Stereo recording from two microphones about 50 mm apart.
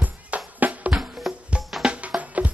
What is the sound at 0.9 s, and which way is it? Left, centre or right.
Music, centre.